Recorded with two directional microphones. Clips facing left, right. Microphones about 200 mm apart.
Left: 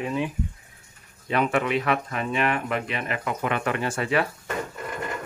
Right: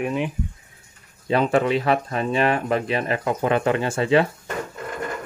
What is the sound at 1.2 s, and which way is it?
Speech, 30° right (ahead or behind).